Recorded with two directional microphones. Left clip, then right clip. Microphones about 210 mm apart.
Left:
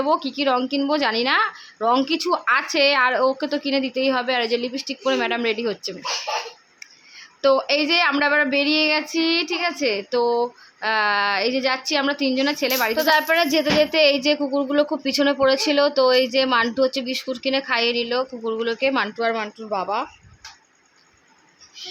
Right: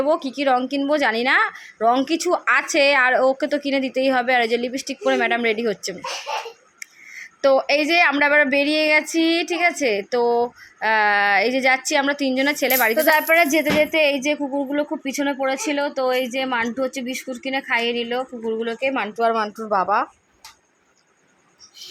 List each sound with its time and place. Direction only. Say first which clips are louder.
0.0 s a woman's voice: right 1 dB; 5° right (ahead or behind)
7.4 s speech: right 1 dB; 10° right (ahead or behind)
14.2 s speech: left 2 dB; 10° left (ahead or behind)
19.3 s speech: right 4 dB; 15° right (ahead or behind)